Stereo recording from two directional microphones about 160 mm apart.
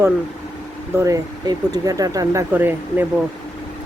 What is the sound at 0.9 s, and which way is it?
Speech, 20° right (ahead or behind).